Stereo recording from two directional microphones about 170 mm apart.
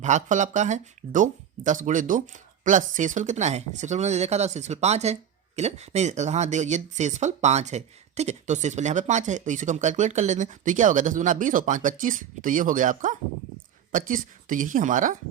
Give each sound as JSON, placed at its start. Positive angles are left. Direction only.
{"t": 0.0, "sound": "speech", "side_deg": -45}